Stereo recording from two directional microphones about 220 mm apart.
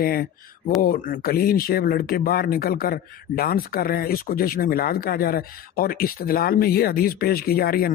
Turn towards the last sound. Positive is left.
turn(degrees=45)  # may be behind; listen again after turning